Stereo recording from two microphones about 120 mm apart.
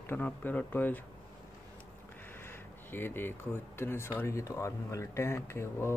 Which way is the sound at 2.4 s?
20° left (ahead or behind).